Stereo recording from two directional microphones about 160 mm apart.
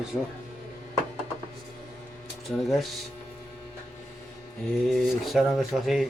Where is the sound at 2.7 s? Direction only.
Centre (ahead or behind).